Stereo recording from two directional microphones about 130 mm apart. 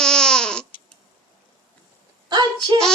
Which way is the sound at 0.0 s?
5° left (ahead or behind).